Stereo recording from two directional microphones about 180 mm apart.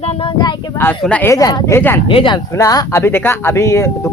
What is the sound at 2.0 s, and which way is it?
Speech, 30° left (ahead or behind).